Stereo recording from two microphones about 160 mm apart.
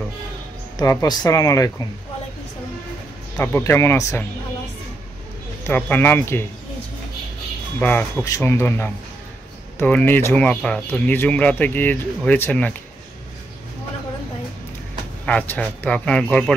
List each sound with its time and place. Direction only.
0.7 s speech: 25° left (ahead or behind)
3.3 s speech: 15° left (ahead or behind)
5.7 s speech: 10° left (ahead or behind)
7.8 s speech: 15° left (ahead or behind)
15.2 s speech: 10° left (ahead or behind)